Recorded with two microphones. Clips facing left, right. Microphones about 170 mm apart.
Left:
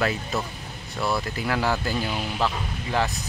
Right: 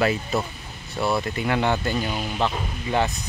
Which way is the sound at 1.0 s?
25° right (ahead or behind).